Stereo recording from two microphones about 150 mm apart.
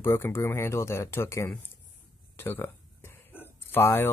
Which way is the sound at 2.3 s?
15° left (ahead or behind).